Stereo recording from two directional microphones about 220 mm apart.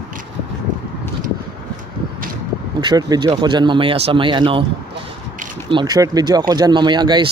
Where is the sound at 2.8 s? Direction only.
20° right (ahead or behind).